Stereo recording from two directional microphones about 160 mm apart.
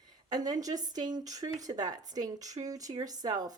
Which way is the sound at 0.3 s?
25° right (ahead or behind).